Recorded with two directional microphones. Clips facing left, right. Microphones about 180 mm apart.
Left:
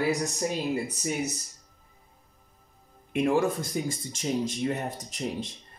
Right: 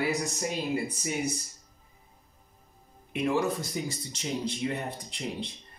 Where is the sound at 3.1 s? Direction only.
50° left (ahead or behind).